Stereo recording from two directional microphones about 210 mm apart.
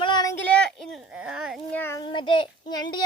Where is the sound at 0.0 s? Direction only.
20° left (ahead or behind).